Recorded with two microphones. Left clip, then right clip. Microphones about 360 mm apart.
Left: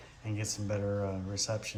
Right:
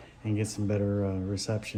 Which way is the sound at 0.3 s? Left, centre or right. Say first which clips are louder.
Right 5 dB; centre.